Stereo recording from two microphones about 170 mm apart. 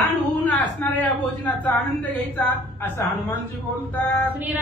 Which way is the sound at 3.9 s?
10° left (ahead or behind).